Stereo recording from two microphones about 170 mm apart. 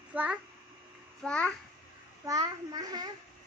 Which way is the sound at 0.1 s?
10° right (ahead or behind).